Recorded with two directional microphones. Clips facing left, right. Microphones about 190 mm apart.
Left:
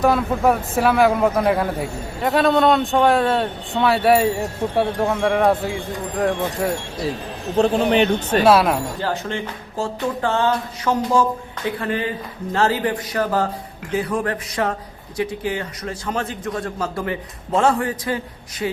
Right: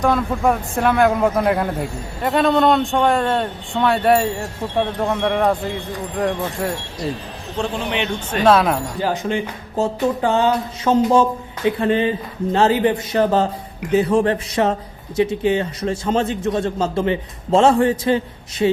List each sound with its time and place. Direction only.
0.0 s a man's voice: 5° left (ahead or behind)
7.5 s speech: 40° left (ahead or behind)
8.4 s a man's voice: 5° left (ahead or behind)
9.0 s speech: 15° right (ahead or behind)